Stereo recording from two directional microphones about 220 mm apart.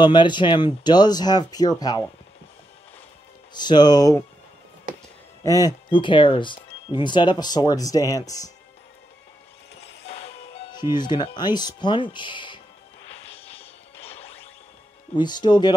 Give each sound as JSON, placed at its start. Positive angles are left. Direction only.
{"t": 0.0, "sound": "speech", "side_deg": 20}
{"t": 3.5, "sound": "speech", "side_deg": 20}
{"t": 5.4, "sound": "speech", "side_deg": 15}
{"t": 10.0, "sound": "music", "side_deg": 25}
{"t": 10.6, "sound": "speech", "side_deg": 20}
{"t": 13.3, "sound": "whip", "side_deg": 25}
{"t": 15.1, "sound": "speech", "side_deg": 20}